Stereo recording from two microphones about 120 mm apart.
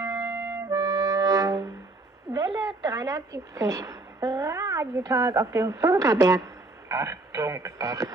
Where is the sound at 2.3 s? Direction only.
35° right (ahead or behind).